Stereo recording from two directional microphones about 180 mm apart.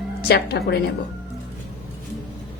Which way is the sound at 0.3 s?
65° left (ahead or behind).